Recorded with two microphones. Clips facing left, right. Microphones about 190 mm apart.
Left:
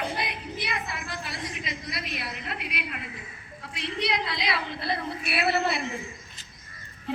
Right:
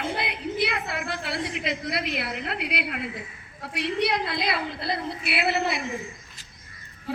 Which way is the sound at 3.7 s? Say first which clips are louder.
Right 4 dB; 60° right (ahead or behind).